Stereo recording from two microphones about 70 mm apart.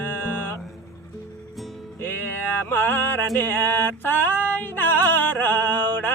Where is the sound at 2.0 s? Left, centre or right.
Left.